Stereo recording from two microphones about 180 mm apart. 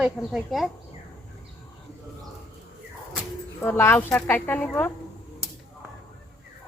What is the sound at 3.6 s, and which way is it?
Speech, 10° left (ahead or behind).